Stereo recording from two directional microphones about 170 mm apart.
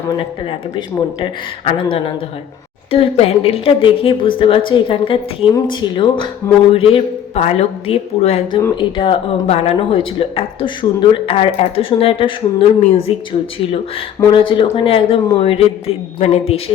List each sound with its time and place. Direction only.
1.2 s speech: 30° left (ahead or behind)
14.3 s speech: 30° left (ahead or behind)